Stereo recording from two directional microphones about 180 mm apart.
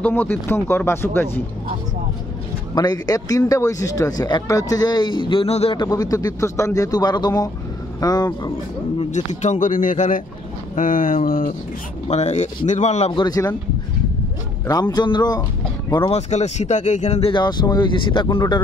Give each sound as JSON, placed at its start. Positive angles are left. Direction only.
{"t": 0.0, "sound": "speech", "side_deg": 10}
{"t": 2.7, "sound": "speech", "side_deg": 25}
{"t": 9.1, "sound": "speech", "side_deg": 40}
{"t": 12.1, "sound": "a man's voice", "side_deg": 40}
{"t": 14.7, "sound": "speech", "side_deg": 20}
{"t": 16.1, "sound": "a man's voice", "side_deg": 40}
{"t": 17.3, "sound": "speech", "side_deg": 25}